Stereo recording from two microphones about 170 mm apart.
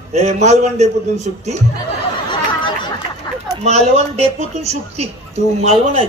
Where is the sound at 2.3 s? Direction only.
30° left (ahead or behind).